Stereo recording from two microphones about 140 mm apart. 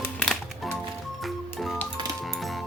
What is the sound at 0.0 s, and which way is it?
Music, 5° left (ahead or behind).